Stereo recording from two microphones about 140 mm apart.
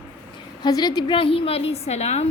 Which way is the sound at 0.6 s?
30° left (ahead or behind).